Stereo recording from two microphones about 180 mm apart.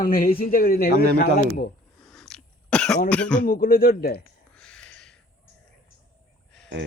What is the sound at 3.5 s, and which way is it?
Speech, 55° left (ahead or behind).